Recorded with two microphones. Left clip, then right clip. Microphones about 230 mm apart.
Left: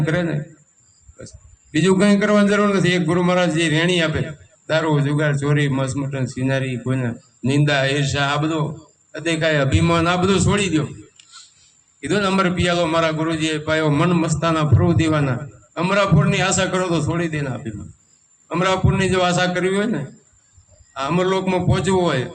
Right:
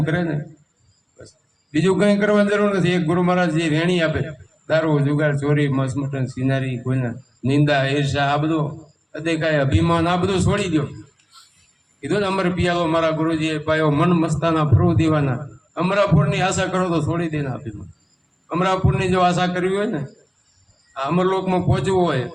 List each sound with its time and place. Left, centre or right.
0.0 s a man's voice: left
12.0 s a man's voice: left